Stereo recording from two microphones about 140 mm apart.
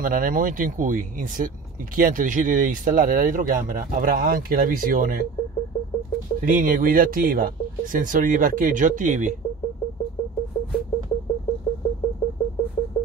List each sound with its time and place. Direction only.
0.0 s speech: 75° right (ahead or behind)
6.4 s speech: 75° right (ahead or behind)